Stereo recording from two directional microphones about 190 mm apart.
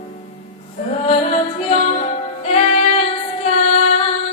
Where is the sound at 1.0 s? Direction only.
35° left (ahead or behind).